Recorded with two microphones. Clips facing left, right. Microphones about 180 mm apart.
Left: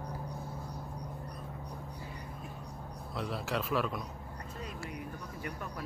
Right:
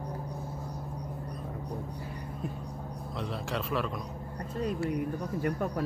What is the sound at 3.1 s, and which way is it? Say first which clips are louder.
Speech: even; centre (ahead or behind).